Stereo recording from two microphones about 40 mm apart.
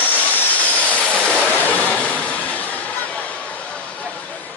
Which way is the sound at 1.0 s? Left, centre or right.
Left.